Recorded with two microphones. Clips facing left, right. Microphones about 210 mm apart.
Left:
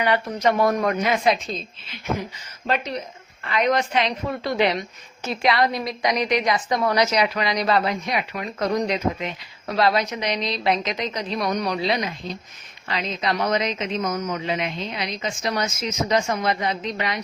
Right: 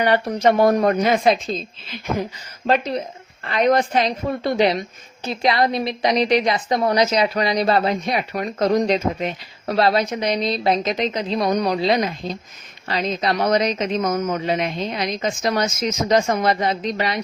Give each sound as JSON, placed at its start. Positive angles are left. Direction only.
{"t": 0.0, "sound": "a woman's voice", "side_deg": -35}
{"t": 2.6, "sound": "a woman's voice", "side_deg": -35}
{"t": 10.0, "sound": "a woman's voice", "side_deg": -45}
{"t": 10.6, "sound": "a woman's voice", "side_deg": -35}